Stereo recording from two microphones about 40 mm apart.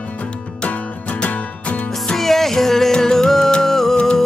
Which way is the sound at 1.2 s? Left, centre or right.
Left.